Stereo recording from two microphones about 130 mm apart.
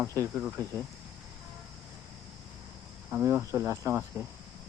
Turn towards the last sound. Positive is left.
turn(degrees=-20)  # may be behind; listen again after turning